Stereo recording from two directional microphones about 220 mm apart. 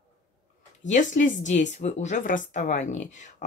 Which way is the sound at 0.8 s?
35° left (ahead or behind).